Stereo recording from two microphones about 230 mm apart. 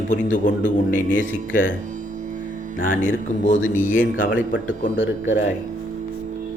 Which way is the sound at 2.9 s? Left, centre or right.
Left.